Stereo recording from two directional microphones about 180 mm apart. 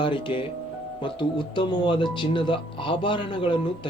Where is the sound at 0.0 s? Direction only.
30° left (ahead or behind).